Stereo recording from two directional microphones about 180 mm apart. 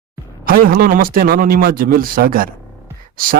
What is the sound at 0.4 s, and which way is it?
A man's voice, 55° right (ahead or behind).